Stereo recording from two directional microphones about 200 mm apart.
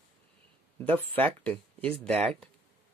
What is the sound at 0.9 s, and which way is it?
Speech, 10° left (ahead or behind).